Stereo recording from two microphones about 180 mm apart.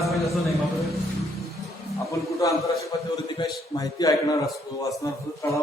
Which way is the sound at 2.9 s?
25° left (ahead or behind).